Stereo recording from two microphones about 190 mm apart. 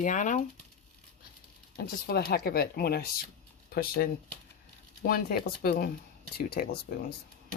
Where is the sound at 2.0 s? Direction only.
55° left (ahead or behind).